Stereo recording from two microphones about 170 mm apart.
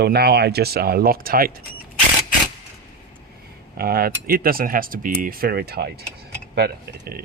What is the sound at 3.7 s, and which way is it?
Speech, 60° right (ahead or behind).